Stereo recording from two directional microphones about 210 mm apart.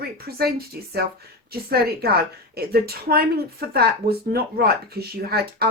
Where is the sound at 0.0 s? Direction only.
50° right (ahead or behind).